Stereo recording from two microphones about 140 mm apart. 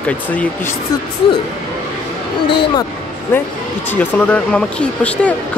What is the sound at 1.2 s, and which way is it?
Speech, 35° left (ahead or behind).